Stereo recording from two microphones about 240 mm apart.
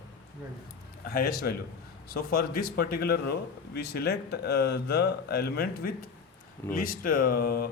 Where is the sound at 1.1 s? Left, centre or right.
Left.